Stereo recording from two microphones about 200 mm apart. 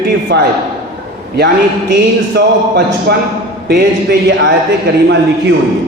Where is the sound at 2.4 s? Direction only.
55° right (ahead or behind).